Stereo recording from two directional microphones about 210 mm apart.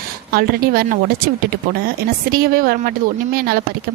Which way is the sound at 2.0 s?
45° right (ahead or behind).